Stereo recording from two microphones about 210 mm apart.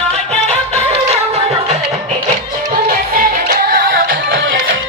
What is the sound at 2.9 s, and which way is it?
Music, 45° right (ahead or behind).